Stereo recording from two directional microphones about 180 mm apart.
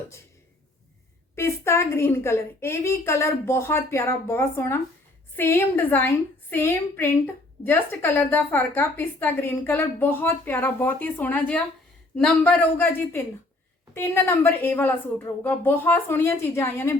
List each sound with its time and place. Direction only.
1.4 s a woman's voice: 15° left (ahead or behind)